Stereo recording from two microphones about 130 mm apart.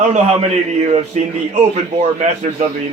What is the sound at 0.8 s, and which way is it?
Speech, 60° right (ahead or behind).